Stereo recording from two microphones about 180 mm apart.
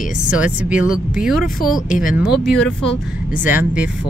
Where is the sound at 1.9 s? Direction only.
50° left (ahead or behind).